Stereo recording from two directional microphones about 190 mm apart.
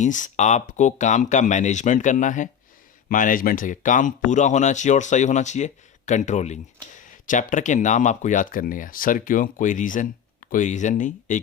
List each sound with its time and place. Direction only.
0.0 s speech: 40° left (ahead or behind)